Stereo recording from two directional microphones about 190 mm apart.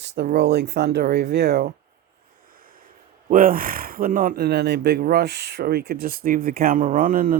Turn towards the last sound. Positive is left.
turn(degrees=-45)  # may be behind; listen again after turning